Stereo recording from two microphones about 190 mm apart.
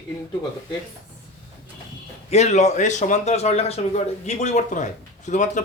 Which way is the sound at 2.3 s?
35° left (ahead or behind).